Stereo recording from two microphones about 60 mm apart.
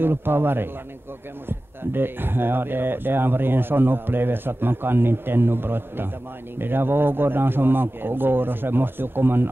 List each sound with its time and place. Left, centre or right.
0.0 s speech: right